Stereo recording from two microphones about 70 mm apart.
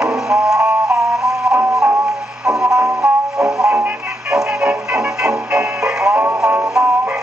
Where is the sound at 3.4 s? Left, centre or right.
Centre.